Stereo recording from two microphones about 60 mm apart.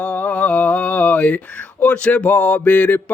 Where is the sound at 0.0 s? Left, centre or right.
Left.